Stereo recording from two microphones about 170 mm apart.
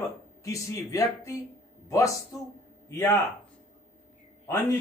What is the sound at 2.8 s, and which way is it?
Speech, 15° left (ahead or behind).